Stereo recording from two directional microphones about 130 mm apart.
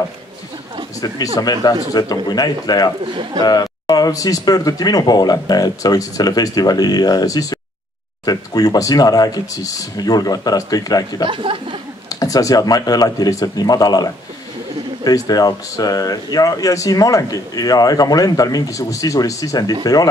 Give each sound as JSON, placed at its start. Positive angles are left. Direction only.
{"t": 1.0, "sound": "a man's voice", "side_deg": 30}
{"t": 11.2, "sound": "speech", "side_deg": -40}
{"t": 12.1, "sound": "speech", "side_deg": 25}